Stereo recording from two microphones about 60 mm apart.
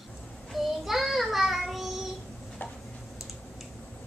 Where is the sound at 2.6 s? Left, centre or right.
Left.